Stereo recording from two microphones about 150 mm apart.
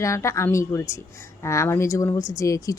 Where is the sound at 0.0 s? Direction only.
20° left (ahead or behind).